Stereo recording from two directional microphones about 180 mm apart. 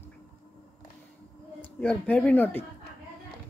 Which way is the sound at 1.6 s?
10° left (ahead or behind).